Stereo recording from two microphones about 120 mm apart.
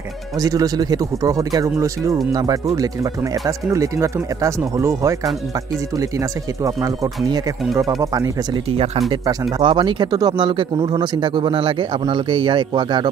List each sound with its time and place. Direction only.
0.4 s speech: 30° right (ahead or behind)
6.6 s a man's voice: 25° right (ahead or behind)
9.6 s a man's voice: 45° right (ahead or behind)